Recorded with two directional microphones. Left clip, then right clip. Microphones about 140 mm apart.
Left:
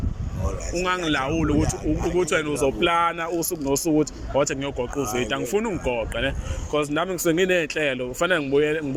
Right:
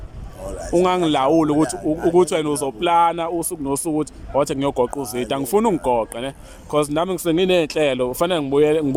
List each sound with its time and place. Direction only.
0.7 s speech: 55° right (ahead or behind); by 7.2 s 40° right (ahead or behind)
7.3 s speech: 20° right (ahead or behind); by 8.8 s 35° right (ahead or behind)